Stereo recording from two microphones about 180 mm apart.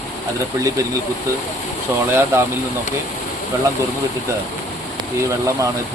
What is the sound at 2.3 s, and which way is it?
Speech, 15° right (ahead or behind).